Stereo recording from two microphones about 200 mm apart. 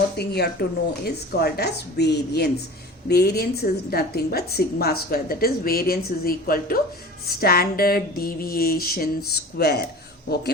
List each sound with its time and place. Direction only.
0.2 s a woman's voice: 55° left (ahead or behind)